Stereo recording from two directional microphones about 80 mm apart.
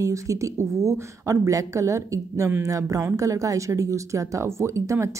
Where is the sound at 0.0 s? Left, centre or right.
Right.